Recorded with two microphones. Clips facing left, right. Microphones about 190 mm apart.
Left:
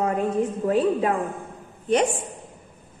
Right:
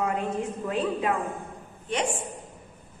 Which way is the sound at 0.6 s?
40° left (ahead or behind).